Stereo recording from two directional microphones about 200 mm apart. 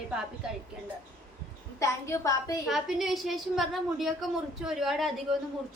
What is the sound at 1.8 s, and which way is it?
Speech, 15° left (ahead or behind).